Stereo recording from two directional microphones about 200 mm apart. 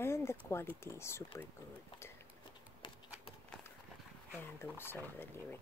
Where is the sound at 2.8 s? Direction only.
25° left (ahead or behind).